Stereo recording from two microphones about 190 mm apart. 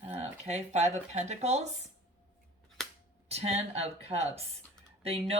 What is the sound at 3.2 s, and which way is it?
Speech, 35° right (ahead or behind).